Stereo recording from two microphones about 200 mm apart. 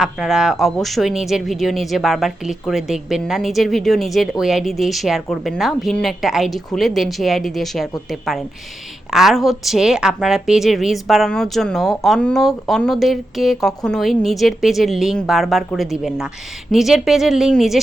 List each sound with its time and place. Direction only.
0.0 s a woman's voice: centre (ahead or behind)